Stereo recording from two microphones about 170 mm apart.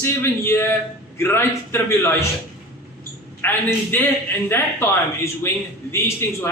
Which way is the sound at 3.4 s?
10° left (ahead or behind).